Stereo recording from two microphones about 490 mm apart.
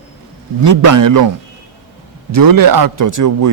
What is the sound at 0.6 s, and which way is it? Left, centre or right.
Speech, right.